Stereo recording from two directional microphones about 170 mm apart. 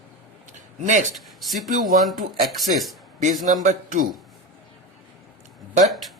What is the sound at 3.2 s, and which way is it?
Speech, 45° right (ahead or behind).